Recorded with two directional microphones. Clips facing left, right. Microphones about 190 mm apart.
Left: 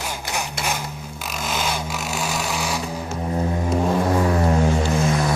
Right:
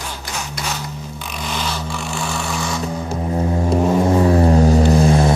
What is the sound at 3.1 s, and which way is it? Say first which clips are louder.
Music: right 3 dB; 30° right (ahead or behind).